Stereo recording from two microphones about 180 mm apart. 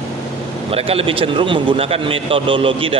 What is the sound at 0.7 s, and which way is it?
A man's voice, 30° right (ahead or behind).